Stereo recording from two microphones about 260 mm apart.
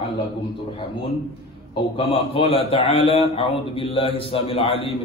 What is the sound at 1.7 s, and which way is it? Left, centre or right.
A man's voice, left.